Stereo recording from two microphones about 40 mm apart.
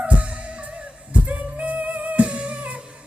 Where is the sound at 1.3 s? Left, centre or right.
Right.